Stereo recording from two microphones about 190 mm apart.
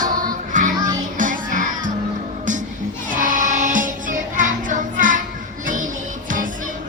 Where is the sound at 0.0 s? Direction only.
45° right (ahead or behind).